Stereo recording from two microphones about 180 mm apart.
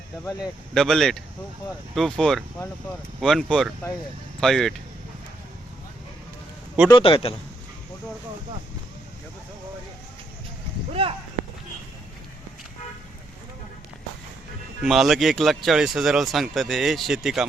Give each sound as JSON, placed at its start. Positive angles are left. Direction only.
{"t": 0.3, "sound": "speech", "side_deg": 5}
{"t": 6.8, "sound": "a man's voice", "side_deg": 25}
{"t": 11.0, "sound": "speech", "side_deg": -30}
{"t": 14.8, "sound": "speech", "side_deg": 0}